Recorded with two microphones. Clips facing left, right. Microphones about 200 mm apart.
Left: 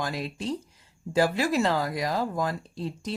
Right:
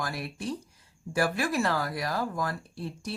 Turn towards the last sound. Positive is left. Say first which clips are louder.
# left 3 dB
turn(degrees=20)  # may be behind; listen again after turning